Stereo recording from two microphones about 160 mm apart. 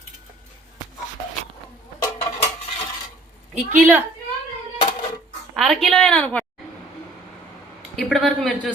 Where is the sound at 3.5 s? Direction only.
10° right (ahead or behind).